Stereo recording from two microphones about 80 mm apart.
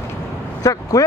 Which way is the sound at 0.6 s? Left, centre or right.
Left.